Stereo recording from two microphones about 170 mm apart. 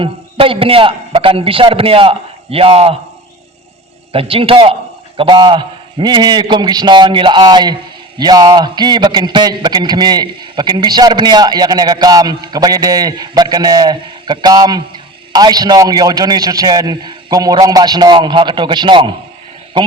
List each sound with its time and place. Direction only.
0.0 s a man's voice: 30° right (ahead or behind)
4.1 s a man's voice: 35° right (ahead or behind)